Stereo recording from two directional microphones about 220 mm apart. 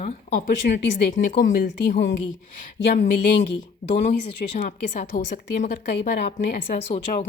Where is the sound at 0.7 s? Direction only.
50° left (ahead or behind).